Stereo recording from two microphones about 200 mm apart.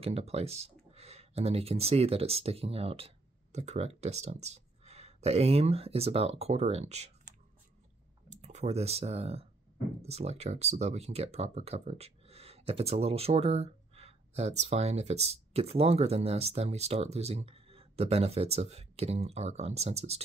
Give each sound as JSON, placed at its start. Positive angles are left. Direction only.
{"t": 0.0, "sound": "speech", "side_deg": -30}
{"t": 8.3, "sound": "speech", "side_deg": -35}